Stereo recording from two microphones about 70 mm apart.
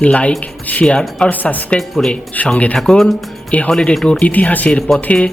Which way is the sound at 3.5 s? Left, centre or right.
Centre.